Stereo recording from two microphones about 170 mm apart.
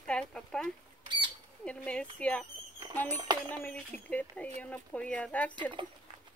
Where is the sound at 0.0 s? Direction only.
5° left (ahead or behind).